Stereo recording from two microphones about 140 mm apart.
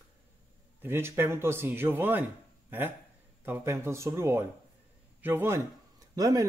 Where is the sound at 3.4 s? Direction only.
20° right (ahead or behind).